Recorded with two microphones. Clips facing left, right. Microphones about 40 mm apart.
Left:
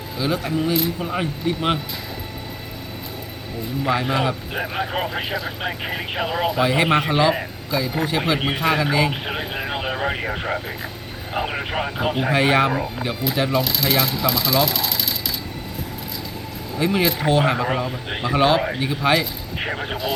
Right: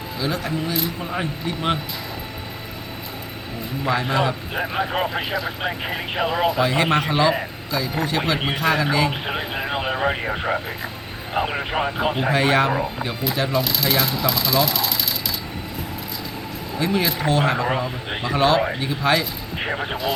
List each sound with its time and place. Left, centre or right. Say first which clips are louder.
0.2 s a man's voice: left 3 dB; centre
3.8 s a man's voice: even; centre
16.7 s a man's voice: left 2 dB; centre